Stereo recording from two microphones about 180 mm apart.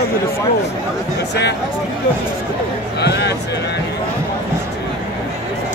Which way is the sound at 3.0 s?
70° left (ahead or behind).